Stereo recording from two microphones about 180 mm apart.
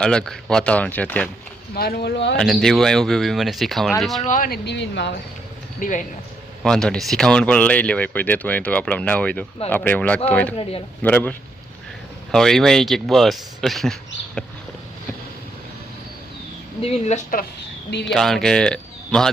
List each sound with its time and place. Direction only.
0.0 s speech: 5° left (ahead or behind)
1.7 s speech: 60° left (ahead or behind)
2.3 s speech: centre (ahead or behind)
4.2 s speech: 45° left (ahead or behind); by 5.1 s 75° left (ahead or behind)
5.8 s speech: 45° left (ahead or behind)
6.6 s speech: 5° left (ahead or behind)
10.6 s speech: 30° left (ahead or behind)
11.0 s speech: 10° left (ahead or behind)
16.8 s speech: 35° left (ahead or behind)
18.1 s speech: centre (ahead or behind)